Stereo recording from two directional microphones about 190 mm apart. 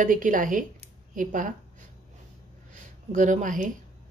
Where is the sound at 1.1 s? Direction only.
45° right (ahead or behind).